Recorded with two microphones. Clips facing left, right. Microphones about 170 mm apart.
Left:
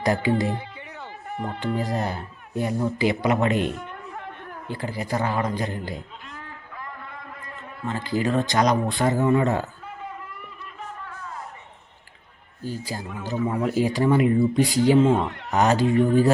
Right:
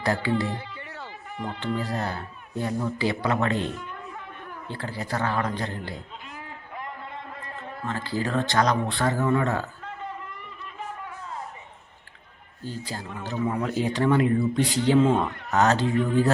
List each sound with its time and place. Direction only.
0.0 s music: 15° left (ahead or behind)
1.5 s speech: 15° left (ahead or behind)
4.7 s speech: 15° left (ahead or behind)
6.7 s a sound: 25° right (ahead or behind)
7.9 s speech: 15° left (ahead or behind)
12.6 s speech: 10° left (ahead or behind)